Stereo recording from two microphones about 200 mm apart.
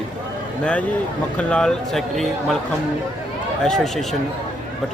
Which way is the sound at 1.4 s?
5° left (ahead or behind).